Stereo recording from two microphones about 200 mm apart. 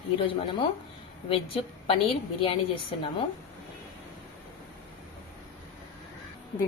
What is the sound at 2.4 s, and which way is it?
Speech, 30° left (ahead or behind).